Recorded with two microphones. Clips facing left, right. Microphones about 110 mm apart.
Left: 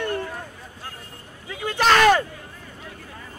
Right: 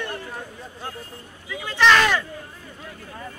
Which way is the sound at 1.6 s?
45° left (ahead or behind).